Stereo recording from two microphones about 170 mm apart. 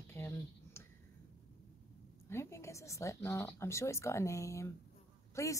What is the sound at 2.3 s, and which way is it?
Speech, 15° left (ahead or behind).